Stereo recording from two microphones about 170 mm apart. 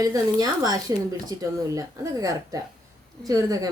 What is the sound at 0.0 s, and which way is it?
Speech, 20° right (ahead or behind).